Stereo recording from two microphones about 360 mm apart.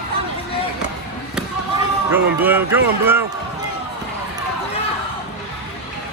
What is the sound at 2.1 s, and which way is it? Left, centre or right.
Speech, centre.